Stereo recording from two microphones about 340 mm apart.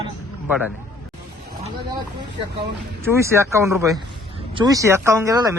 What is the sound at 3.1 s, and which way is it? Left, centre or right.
Speech, centre.